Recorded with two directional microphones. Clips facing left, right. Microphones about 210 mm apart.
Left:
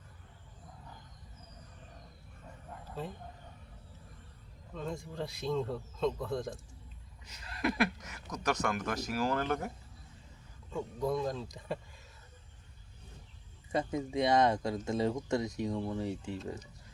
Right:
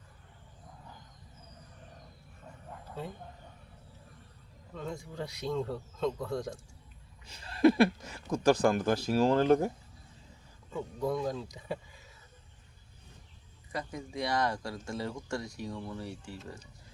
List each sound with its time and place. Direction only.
4.7 s speech: centre (ahead or behind)
7.3 s speech: 30° right (ahead or behind)
10.7 s speech: centre (ahead or behind)
13.7 s speech: 20° left (ahead or behind)